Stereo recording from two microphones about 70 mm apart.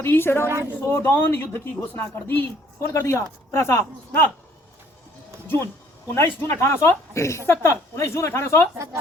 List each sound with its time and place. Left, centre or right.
0.0 s speech: left
0.4 s a woman's voice: right
0.7 s speech: left
6.1 s speech: left